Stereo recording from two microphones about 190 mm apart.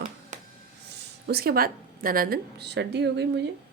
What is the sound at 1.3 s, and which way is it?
A woman's voice, 55° right (ahead or behind).